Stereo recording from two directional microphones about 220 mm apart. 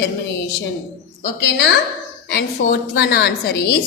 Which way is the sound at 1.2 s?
50° left (ahead or behind).